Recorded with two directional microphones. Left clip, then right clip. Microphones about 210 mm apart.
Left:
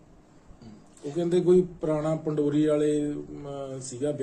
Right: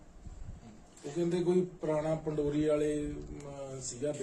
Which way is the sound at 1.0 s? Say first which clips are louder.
Left 7 dB; 40° left (ahead or behind).